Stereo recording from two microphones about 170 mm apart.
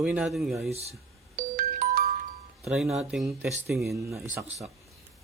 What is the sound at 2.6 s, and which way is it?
Speech, centre (ahead or behind).